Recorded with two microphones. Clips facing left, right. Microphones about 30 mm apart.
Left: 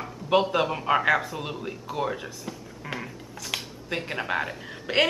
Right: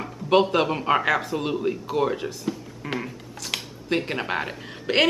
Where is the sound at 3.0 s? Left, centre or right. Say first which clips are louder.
Right 3 dB; centre.